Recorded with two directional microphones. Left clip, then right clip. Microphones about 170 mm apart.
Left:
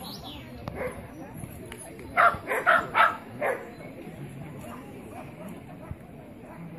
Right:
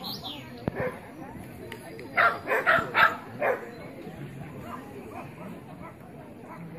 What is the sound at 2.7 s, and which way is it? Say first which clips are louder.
Dog: left 1 dB; 30° left (ahead or behind).